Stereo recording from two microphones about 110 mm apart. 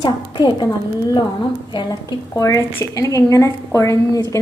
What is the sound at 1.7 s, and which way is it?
A woman's voice, 40° left (ahead or behind).